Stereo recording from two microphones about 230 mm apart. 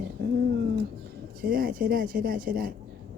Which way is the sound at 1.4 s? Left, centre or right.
Right.